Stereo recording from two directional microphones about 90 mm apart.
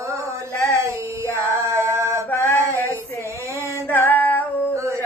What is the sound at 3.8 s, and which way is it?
Female singing, 20° left (ahead or behind).